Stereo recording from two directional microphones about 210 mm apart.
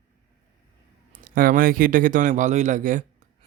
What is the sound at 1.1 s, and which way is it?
Speech, 40° right (ahead or behind).